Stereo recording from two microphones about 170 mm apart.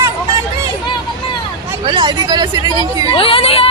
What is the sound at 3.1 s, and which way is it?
Speech, 30° left (ahead or behind).